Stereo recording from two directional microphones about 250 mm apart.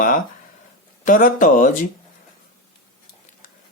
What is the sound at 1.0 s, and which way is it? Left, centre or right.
Speech, left.